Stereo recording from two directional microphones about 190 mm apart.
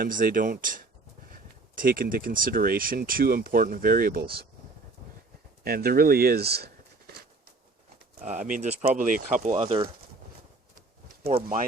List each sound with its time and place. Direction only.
0.0 s speech: 45° right (ahead or behind)
5.6 s speech: 55° right (ahead or behind)
8.2 s speech: 40° right (ahead or behind)